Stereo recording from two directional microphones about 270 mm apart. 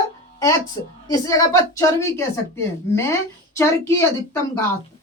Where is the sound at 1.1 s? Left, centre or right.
Centre.